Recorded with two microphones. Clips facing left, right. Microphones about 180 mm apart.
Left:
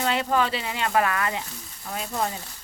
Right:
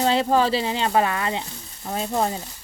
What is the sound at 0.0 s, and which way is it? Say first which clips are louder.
Speech: right 4 dB; 30° right (ahead or behind).